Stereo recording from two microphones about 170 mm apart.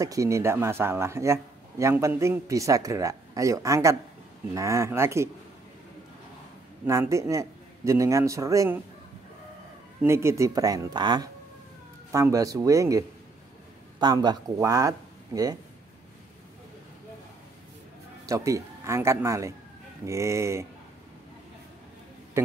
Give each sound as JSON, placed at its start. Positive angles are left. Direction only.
{"t": 0.0, "sound": "speech", "side_deg": -20}
{"t": 6.9, "sound": "speech", "side_deg": -15}
{"t": 10.0, "sound": "speech", "side_deg": -15}
{"t": 18.2, "sound": "speech", "side_deg": -20}